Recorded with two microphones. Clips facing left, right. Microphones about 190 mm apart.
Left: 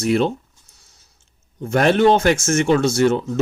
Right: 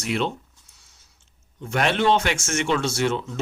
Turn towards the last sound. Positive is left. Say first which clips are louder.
# left 7 dB
turn(degrees=40)  # may be behind; listen again after turning